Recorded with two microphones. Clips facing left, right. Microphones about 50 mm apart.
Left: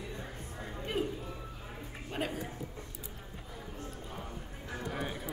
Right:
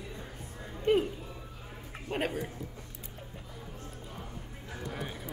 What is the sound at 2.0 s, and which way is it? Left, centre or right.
Speech, right.